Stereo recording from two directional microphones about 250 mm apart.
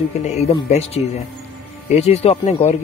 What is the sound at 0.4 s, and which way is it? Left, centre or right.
Speech, left.